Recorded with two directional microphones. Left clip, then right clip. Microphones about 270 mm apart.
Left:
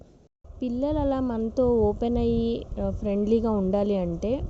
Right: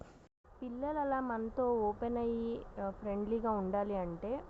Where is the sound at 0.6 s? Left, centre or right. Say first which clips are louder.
Left 10 dB; left.